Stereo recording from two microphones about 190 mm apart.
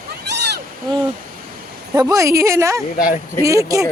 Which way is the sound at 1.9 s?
15° right (ahead or behind).